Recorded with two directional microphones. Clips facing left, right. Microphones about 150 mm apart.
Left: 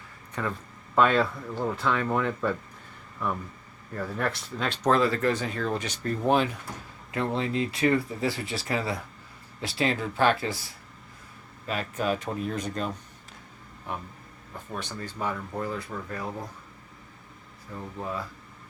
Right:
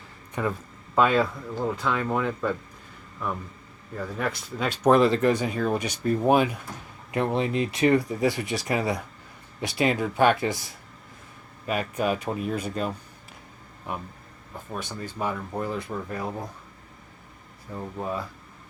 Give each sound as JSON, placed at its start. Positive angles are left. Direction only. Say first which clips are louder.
{"t": 0.4, "sound": "speech", "louder": "right 4 dB", "side_deg": -15}
{"t": 0.9, "sound": "speech", "louder": "right 1 dB", "side_deg": -5}
{"t": 3.9, "sound": "speech", "louder": "even", "side_deg": -5}
{"t": 4.9, "sound": "speech", "louder": "right 4 dB", "side_deg": -20}
{"t": 11.6, "sound": "speech", "louder": "right 3 dB", "side_deg": -10}
{"t": 14.8, "sound": "speech", "louder": "right 2 dB", "side_deg": -10}
{"t": 17.7, "sound": "speech", "louder": "right 3 dB", "side_deg": -20}